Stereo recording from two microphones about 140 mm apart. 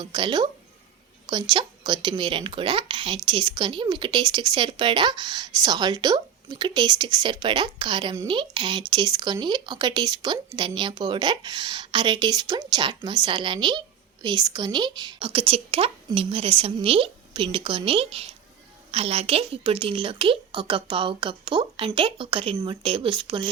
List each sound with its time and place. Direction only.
0.0 s speech: 35° right (ahead or behind)